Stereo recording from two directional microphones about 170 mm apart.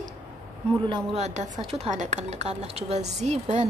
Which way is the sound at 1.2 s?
40° right (ahead or behind).